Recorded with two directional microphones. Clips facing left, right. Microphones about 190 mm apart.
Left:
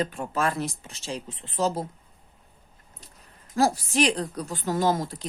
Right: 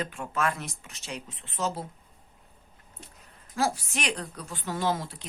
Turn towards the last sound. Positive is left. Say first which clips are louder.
# left 5 dB
turn(degrees=40)  # may be behind; listen again after turning